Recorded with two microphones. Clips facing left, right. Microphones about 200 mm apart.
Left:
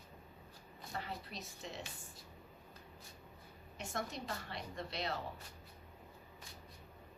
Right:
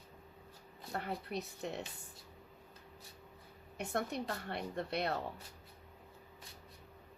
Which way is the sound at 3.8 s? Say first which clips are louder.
Right 5 dB; 60° right (ahead or behind).